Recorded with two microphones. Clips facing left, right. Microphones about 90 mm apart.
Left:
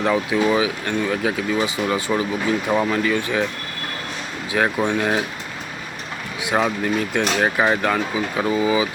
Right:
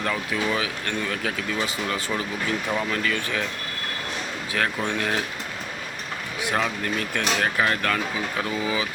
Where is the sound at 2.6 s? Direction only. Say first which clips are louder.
Left 6 dB; 30° left (ahead or behind).